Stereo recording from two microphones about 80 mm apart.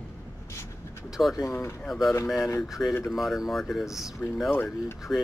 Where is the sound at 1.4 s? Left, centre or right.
Left.